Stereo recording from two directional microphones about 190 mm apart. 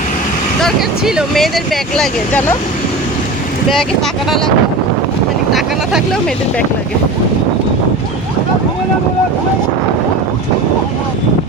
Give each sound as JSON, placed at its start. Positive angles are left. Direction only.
{"t": 0.6, "sound": "speech", "side_deg": 0}
{"t": 3.7, "sound": "speech", "side_deg": 0}
{"t": 5.5, "sound": "speech", "side_deg": 0}